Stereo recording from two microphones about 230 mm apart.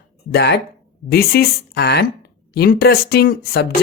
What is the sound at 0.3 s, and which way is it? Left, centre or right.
Speech, left.